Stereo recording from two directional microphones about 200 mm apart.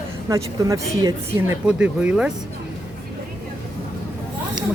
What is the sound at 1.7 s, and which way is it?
Speech, 5° right (ahead or behind).